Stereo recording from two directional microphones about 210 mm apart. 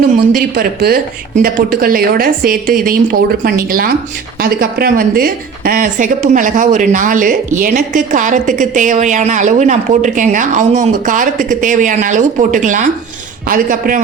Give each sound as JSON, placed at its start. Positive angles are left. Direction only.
{"t": 0.2, "sound": "a woman's voice", "side_deg": -45}